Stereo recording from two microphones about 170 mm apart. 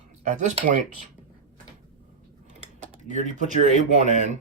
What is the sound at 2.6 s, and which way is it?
Typing, 45° right (ahead or behind).